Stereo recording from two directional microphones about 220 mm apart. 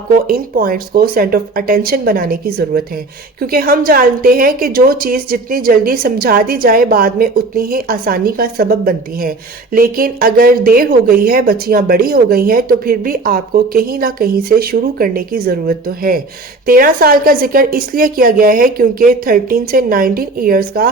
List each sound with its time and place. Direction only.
0.3 s speech: 40° right (ahead or behind)